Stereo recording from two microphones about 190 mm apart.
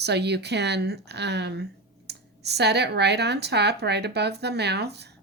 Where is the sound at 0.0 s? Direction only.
60° right (ahead or behind).